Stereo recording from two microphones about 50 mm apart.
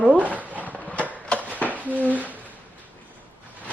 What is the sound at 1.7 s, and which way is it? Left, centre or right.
Dishes, right.